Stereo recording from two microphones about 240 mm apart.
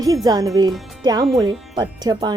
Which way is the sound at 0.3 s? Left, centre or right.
Centre.